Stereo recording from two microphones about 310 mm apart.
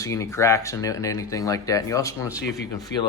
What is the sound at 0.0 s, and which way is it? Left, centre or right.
Speech, centre.